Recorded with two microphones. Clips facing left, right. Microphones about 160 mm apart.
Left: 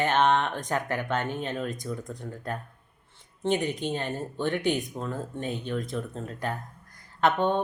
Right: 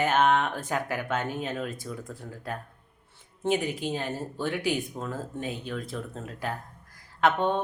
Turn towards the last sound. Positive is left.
turn(degrees=0)  # may be behind; listen again after turning